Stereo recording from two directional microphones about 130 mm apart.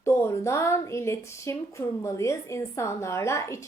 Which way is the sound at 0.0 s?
20° left (ahead or behind).